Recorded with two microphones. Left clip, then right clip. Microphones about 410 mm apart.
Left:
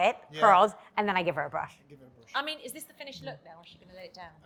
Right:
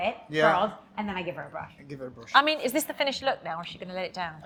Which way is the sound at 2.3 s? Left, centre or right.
Right.